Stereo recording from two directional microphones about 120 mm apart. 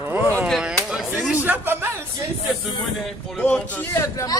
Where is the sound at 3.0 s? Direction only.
5° left (ahead or behind).